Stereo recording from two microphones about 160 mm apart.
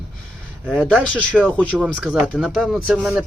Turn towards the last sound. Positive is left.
turn(degrees=-5)  # may be behind; listen again after turning